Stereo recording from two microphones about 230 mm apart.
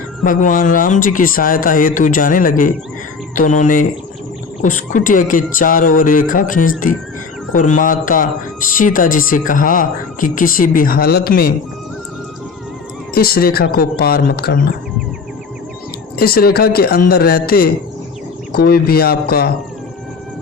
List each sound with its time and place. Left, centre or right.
0.3 s speech: left
13.1 s speech: left
16.1 s speech: left